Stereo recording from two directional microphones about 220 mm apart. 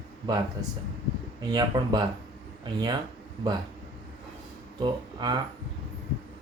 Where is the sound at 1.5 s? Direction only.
20° right (ahead or behind).